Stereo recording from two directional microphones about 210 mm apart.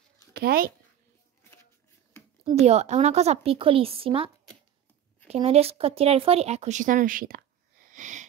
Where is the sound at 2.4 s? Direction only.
30° right (ahead or behind).